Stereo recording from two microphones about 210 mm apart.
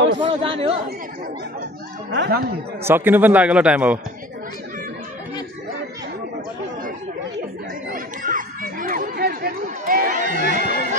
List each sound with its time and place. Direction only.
0.2 s speech: 25° right (ahead or behind)
2.1 s speech: 50° right (ahead or behind)
2.8 s a man's voice: 10° right (ahead or behind)
7.9 s a sound: 40° right (ahead or behind)